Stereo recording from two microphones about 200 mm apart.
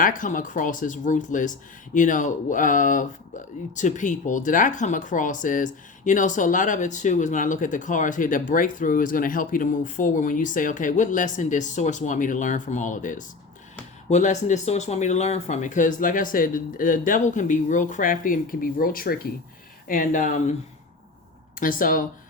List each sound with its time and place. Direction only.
0.0 s speech: 40° left (ahead or behind)
21.6 s speech: 45° left (ahead or behind)